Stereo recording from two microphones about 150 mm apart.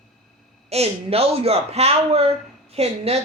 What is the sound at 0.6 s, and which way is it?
Speech, 45° right (ahead or behind).